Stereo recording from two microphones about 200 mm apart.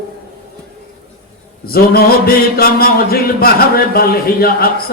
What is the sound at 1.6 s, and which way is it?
Mantra, 50° left (ahead or behind).